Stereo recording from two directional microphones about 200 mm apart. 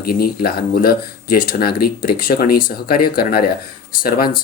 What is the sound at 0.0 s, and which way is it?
Speech, 50° left (ahead or behind).